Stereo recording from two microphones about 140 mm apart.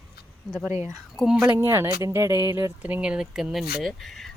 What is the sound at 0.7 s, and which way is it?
Speech, 20° right (ahead or behind).